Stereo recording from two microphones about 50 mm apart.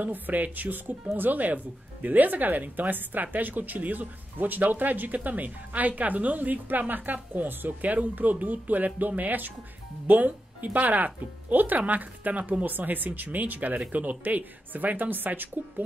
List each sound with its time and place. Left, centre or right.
0.0 s speech: right